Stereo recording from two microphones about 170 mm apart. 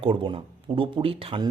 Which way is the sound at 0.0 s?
30° right (ahead or behind).